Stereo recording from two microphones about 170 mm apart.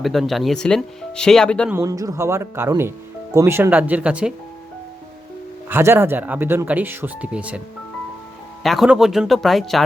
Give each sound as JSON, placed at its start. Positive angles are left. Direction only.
{"t": 0.0, "sound": "speech", "side_deg": 0}
{"t": 1.7, "sound": "speech", "side_deg": -20}
{"t": 5.6, "sound": "speech", "side_deg": -15}
{"t": 8.6, "sound": "speech", "side_deg": 0}